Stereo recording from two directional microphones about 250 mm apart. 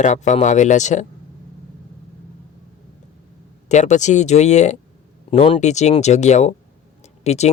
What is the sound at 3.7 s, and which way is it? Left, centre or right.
Speech, left.